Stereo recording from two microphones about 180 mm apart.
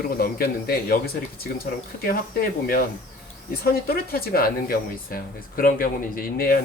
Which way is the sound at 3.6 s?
55° left (ahead or behind).